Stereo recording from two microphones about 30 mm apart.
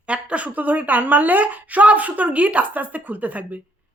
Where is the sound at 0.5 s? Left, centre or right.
Right.